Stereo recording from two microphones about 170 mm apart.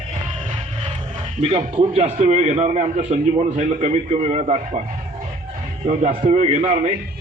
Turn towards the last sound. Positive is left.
turn(degrees=-35)  # may be behind; listen again after turning